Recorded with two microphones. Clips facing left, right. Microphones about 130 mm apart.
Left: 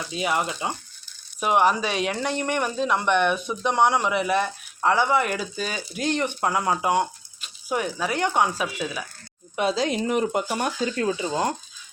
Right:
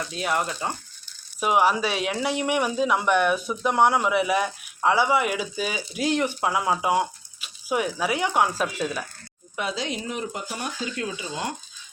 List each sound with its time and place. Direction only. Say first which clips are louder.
0.0 s speech: left 1 dB; centre (ahead or behind)
10.1 s speech: left 8 dB; 60° left (ahead or behind)
10.9 s speech: left 6 dB; 40° left (ahead or behind)